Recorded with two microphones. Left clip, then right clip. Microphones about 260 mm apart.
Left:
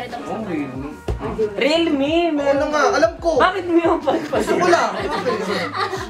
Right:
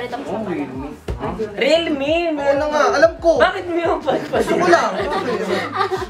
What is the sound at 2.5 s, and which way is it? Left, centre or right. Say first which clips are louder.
A woman's voice: right 1 dB; centre.